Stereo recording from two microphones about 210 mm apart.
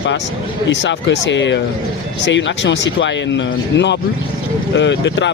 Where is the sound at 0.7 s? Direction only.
60° left (ahead or behind).